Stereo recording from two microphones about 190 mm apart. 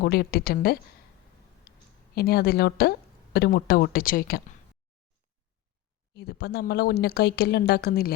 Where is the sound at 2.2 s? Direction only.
55° left (ahead or behind).